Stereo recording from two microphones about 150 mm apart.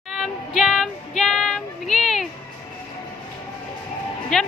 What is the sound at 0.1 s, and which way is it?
Child singing, centre (ahead or behind).